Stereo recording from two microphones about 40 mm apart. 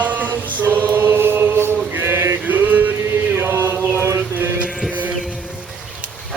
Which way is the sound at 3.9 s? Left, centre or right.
Right.